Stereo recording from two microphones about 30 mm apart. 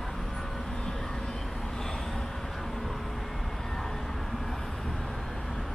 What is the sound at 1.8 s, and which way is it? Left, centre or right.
Vehicle, centre.